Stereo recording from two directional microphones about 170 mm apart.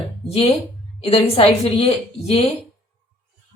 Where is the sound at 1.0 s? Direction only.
35° left (ahead or behind).